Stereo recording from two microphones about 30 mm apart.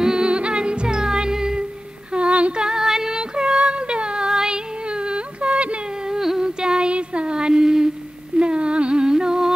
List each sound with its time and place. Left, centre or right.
0.0 s music: right
2.1 s female singing: right
2.6 s female singing: centre
3.1 s a sound: right
4.3 s child singing: right
4.8 s a sound: right
6.4 s music: right
6.9 s a sound: right
8.4 s humming: right
9.0 s humming: right